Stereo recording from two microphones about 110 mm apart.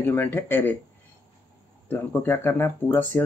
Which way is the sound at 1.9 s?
20° left (ahead or behind).